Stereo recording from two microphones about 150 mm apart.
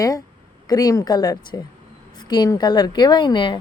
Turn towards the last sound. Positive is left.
turn(degrees=30)  # may be behind; listen again after turning